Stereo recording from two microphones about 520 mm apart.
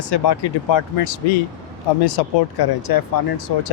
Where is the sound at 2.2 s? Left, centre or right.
Left.